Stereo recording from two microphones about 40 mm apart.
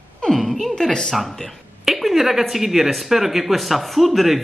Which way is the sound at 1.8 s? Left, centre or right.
Centre.